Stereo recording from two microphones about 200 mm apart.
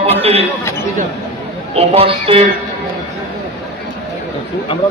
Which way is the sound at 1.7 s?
30° right (ahead or behind).